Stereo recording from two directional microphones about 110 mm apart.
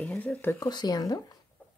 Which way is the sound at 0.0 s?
15° left (ahead or behind).